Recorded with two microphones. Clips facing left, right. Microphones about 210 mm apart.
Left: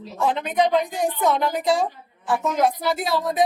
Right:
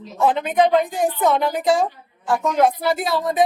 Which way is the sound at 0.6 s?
50° right (ahead or behind).